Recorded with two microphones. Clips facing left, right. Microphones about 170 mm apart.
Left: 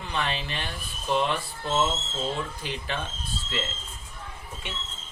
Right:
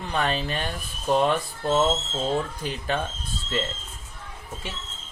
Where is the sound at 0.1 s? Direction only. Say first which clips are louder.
Right 5 dB; 40° right (ahead or behind).